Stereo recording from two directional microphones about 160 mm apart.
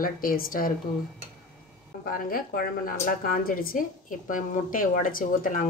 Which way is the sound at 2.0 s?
60° left (ahead or behind).